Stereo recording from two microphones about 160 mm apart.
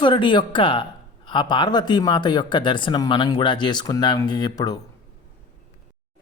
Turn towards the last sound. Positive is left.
turn(degrees=25)  # may be behind; listen again after turning